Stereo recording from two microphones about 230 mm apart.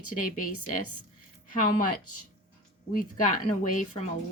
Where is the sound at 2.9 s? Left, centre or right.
Left.